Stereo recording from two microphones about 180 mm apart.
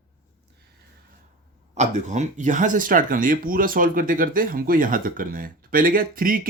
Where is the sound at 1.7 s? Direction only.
40° right (ahead or behind).